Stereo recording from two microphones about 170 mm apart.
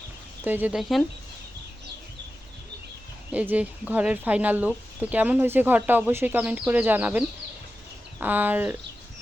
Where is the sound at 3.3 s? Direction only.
10° right (ahead or behind).